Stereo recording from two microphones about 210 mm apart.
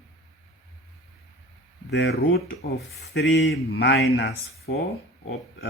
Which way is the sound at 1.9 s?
55° left (ahead or behind).